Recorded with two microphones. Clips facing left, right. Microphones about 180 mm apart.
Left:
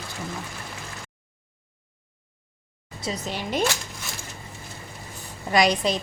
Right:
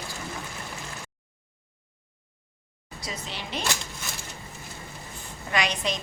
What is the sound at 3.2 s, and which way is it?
Speech, 45° left (ahead or behind).